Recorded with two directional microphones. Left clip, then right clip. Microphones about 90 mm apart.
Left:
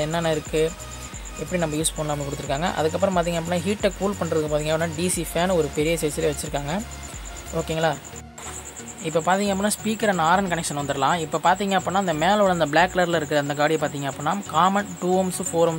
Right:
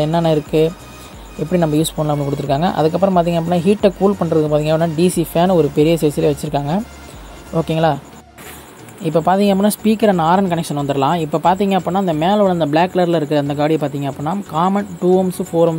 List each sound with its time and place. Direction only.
0.0 s speech: 40° right (ahead or behind)
9.0 s speech: 40° right (ahead or behind); by 15.7 s 10° right (ahead or behind)